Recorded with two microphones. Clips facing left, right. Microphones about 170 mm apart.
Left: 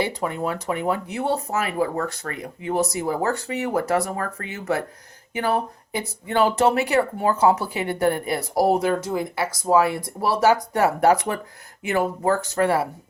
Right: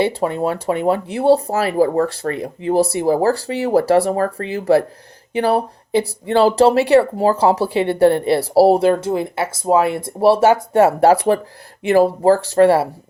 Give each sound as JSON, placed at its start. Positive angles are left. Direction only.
{"t": 0.0, "sound": "speech", "side_deg": -25}